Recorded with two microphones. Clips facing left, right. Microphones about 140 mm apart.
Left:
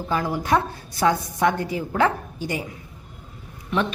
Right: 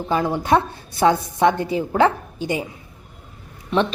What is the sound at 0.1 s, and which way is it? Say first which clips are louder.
A woman's voice: right 3 dB; 25° right (ahead or behind).